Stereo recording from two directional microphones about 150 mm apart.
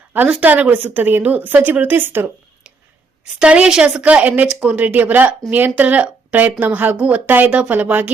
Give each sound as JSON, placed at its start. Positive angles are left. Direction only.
{"t": 0.1, "sound": "a woman's voice", "side_deg": -10}